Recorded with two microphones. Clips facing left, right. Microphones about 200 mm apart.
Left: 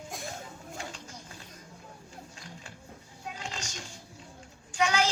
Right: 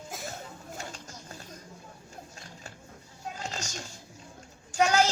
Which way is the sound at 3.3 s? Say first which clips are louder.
Right 3 dB; 40° right (ahead or behind).